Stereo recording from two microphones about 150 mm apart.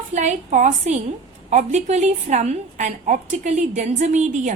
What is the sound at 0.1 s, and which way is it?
A woman's voice, 55° right (ahead or behind).